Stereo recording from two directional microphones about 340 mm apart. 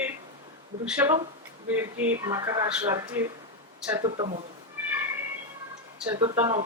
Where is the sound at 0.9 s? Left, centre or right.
Centre.